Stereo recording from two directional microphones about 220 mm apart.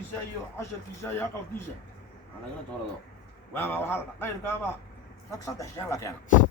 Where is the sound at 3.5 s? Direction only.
10° left (ahead or behind).